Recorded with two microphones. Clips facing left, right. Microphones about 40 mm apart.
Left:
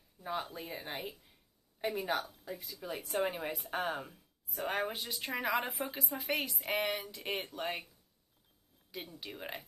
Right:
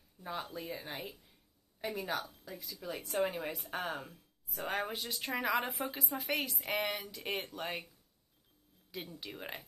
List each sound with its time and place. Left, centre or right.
0.2 s a woman's voice: centre
8.9 s speech: centre